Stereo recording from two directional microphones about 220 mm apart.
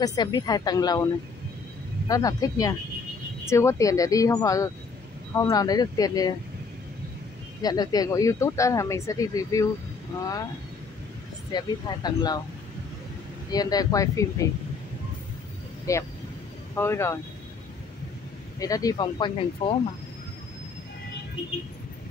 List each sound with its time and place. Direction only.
0.0 s speech: 20° left (ahead or behind)
7.6 s speech: 15° left (ahead or behind)
11.5 s speech: 20° left (ahead or behind)
13.5 s speech: 15° left (ahead or behind)
16.7 s speech: 10° left (ahead or behind)
18.6 s speech: 15° left (ahead or behind)